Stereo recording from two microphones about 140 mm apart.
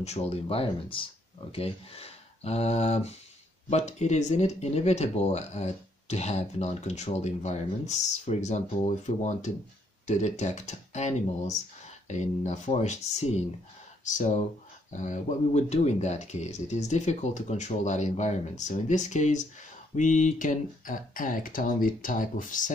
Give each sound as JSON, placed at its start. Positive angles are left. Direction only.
{"t": 0.0, "sound": "speech", "side_deg": 50}